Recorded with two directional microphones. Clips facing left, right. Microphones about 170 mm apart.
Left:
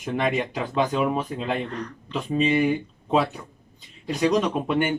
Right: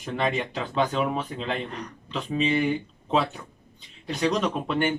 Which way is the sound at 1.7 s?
10° right (ahead or behind).